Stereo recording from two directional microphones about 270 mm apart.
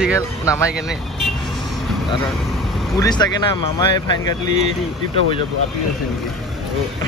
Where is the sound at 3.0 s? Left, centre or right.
Centre.